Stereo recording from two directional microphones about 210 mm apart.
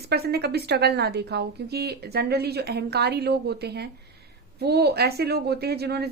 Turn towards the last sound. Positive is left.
turn(degrees=-50)  # may be behind; listen again after turning